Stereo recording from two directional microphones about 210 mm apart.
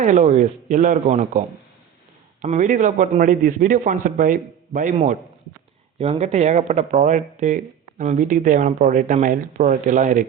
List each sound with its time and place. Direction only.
0.0 s speech: 35° right (ahead or behind)